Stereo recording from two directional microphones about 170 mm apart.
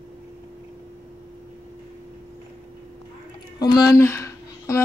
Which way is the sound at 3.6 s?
20° left (ahead or behind).